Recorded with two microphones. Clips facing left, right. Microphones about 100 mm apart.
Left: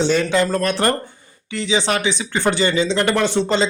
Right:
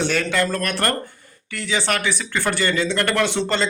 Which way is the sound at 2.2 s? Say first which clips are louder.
Left 4 dB; 20° left (ahead or behind).